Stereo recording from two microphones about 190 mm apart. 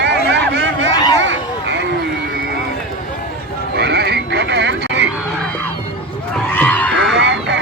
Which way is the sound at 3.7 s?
55° right (ahead or behind).